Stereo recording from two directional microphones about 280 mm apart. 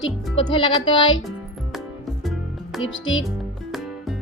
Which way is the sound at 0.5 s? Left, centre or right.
Centre.